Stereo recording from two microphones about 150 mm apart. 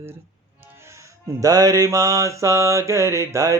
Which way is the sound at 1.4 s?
20° right (ahead or behind).